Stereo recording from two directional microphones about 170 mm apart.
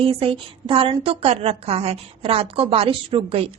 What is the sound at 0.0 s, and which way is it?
A woman's voice, 35° right (ahead or behind).